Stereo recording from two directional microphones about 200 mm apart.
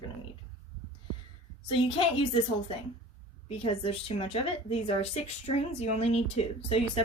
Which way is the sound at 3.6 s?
30° left (ahead or behind).